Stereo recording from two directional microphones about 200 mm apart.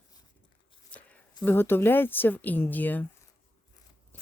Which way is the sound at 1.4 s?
10° left (ahead or behind).